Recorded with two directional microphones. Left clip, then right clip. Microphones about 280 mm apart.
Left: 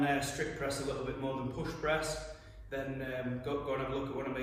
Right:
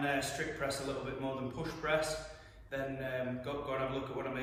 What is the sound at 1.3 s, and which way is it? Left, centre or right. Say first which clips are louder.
A man's voice: left 1 dB; centre.